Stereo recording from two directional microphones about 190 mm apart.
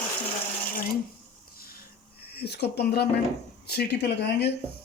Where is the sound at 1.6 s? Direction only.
50° left (ahead or behind).